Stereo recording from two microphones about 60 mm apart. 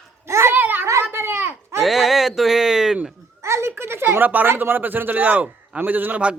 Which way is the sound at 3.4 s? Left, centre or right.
Right.